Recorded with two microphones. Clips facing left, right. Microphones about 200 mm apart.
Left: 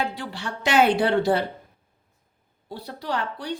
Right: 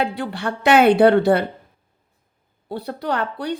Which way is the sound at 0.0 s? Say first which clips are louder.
Right 6 dB; 60° right (ahead or behind).